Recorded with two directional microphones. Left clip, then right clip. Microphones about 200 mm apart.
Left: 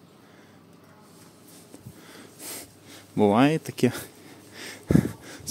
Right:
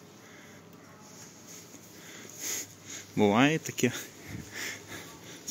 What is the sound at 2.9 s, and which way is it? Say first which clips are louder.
Speech: left 4 dB; 25° left (ahead or behind).